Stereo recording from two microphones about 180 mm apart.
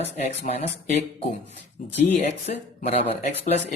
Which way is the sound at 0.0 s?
40° left (ahead or behind).